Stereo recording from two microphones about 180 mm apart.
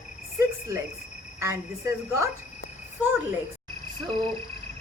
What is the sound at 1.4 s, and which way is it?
Speech, 15° right (ahead or behind).